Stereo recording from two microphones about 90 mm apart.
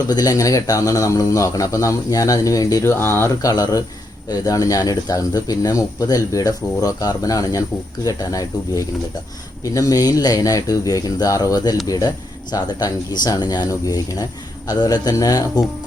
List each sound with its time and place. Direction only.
0.1 s speech: 40° left (ahead or behind)
2.9 s speech: 25° left (ahead or behind)
3.5 s speech: 45° left (ahead or behind)